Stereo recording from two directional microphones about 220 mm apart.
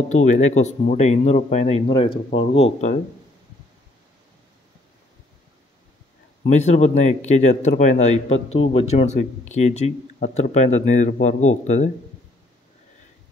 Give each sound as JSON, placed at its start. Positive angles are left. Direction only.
{"t": 0.1, "sound": "speech", "side_deg": 30}
{"t": 6.5, "sound": "speech", "side_deg": 30}